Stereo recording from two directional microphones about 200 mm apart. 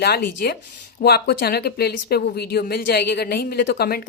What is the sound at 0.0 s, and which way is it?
Speech, 55° left (ahead or behind).